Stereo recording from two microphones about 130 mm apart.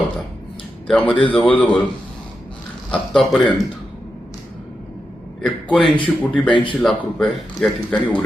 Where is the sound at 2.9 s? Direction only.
5° left (ahead or behind).